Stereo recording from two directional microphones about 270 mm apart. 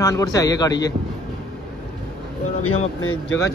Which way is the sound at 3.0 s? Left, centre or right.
Left.